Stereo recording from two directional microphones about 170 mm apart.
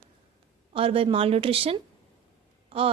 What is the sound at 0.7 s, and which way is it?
Speech, 35° right (ahead or behind).